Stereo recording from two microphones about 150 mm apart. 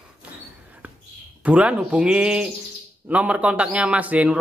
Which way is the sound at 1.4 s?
10° right (ahead or behind).